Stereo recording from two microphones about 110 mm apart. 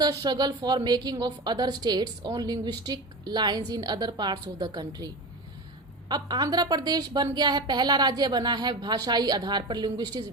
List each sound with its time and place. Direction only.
0.0 s a woman's voice: 35° right (ahead or behind)